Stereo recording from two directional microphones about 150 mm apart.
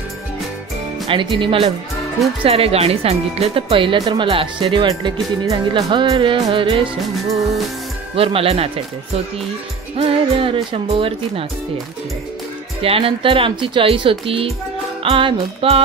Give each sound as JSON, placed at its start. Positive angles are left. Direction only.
{"t": 1.0, "sound": "speech", "side_deg": -35}
{"t": 7.0, "sound": "music", "side_deg": 0}
{"t": 8.2, "sound": "speech", "side_deg": -40}
{"t": 9.9, "sound": "speech", "side_deg": -35}
{"t": 12.8, "sound": "speech", "side_deg": -40}